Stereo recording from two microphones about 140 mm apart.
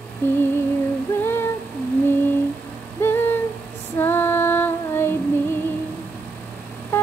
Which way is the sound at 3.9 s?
15° left (ahead or behind).